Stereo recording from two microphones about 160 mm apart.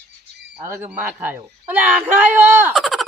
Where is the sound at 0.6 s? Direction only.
15° right (ahead or behind).